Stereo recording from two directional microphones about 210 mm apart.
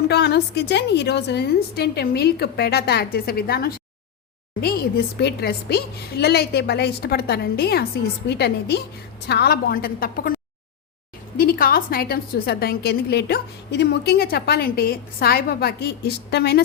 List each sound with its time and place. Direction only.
0.1 s a woman's voice: 50° left (ahead or behind)
11.3 s a woman's voice: 45° left (ahead or behind)